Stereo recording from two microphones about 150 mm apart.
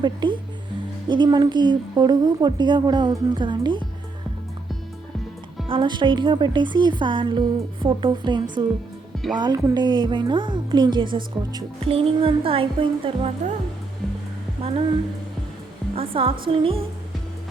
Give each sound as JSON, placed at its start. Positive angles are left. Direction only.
{"t": 0.0, "sound": "a woman's voice", "side_deg": -30}
{"t": 5.6, "sound": "a woman's voice", "side_deg": -35}
{"t": 16.0, "sound": "a woman's voice", "side_deg": -40}